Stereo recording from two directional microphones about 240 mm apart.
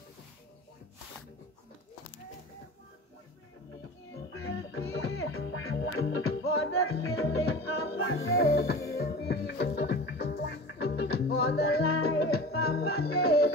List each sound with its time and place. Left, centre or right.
4.3 s music: left
8.0 s music: left